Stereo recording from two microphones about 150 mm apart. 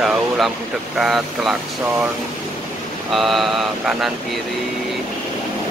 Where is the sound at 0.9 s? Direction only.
Centre (ahead or behind).